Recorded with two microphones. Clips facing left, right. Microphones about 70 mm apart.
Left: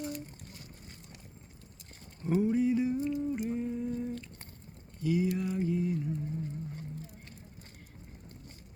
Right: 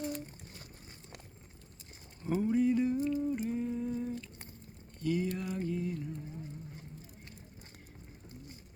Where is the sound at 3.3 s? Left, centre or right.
Centre.